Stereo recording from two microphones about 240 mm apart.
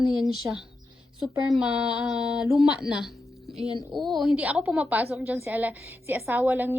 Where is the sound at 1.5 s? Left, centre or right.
Centre.